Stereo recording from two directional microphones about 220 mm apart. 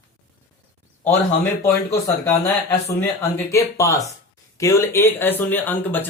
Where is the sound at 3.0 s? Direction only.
10° left (ahead or behind).